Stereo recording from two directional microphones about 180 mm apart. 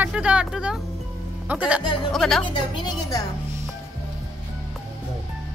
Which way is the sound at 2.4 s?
25° left (ahead or behind).